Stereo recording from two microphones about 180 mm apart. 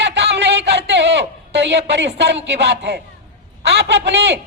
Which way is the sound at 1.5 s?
80° right.